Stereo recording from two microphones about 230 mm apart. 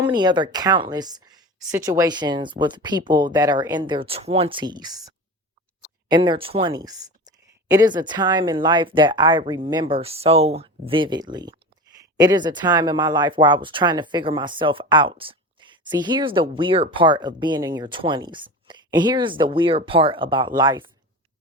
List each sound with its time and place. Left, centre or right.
0.1 s speech: centre